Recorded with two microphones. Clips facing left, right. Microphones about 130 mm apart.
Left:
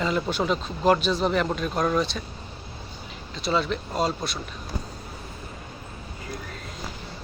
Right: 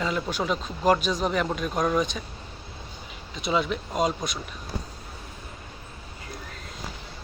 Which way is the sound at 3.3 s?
10° right (ahead or behind).